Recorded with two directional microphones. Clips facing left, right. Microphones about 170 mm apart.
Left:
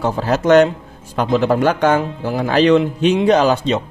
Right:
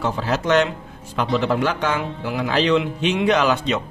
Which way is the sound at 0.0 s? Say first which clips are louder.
Left 5 dB; 45° left (ahead or behind).